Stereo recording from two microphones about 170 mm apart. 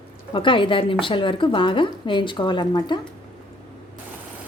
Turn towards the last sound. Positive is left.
turn(degrees=25)  # may be behind; listen again after turning